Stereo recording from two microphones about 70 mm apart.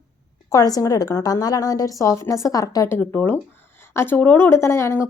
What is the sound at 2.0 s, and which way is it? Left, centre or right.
Speech, left.